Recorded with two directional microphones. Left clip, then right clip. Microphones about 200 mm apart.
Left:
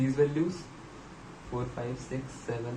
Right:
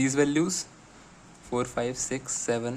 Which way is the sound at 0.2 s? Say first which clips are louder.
Right 1 dB; 50° right (ahead or behind).